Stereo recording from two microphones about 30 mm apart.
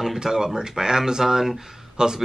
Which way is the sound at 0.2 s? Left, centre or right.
Centre.